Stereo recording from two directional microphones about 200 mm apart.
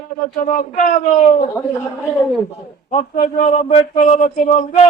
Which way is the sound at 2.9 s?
30° left (ahead or behind).